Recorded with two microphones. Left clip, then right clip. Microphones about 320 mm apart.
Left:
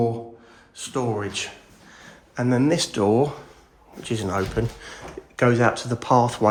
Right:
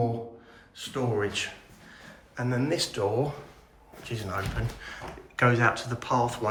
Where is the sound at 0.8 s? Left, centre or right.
Centre.